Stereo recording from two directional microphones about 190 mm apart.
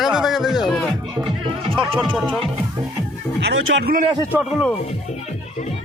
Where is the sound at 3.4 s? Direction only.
75° right (ahead or behind).